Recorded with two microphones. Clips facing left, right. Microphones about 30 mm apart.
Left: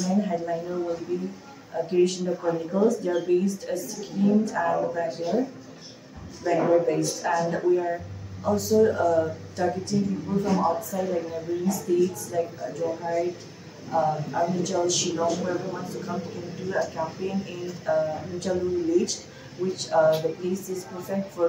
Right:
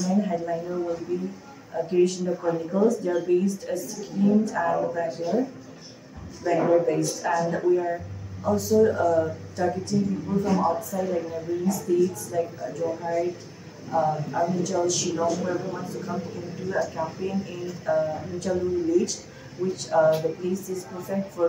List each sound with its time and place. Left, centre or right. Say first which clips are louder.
0.0 s a sound: right 1 dB; centre
0.5 s a woman's voice: even; centre
2.2 s speech: even; centre
3.9 s a woman's voice: right 1 dB; left
4.6 s speech: even; centre
5.0 s a woman's voice: even; centre
6.4 s speech: even; centre
8.5 s a woman's voice: even; left
8.8 s speech: even; centre
10.0 s speech: right 1 dB; centre
12.1 s speech: even; centre